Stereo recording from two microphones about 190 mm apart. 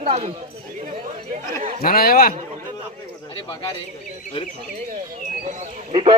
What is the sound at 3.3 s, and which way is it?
Speech, 20° left (ahead or behind).